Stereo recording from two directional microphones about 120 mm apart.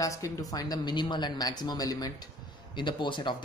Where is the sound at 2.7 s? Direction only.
40° left (ahead or behind).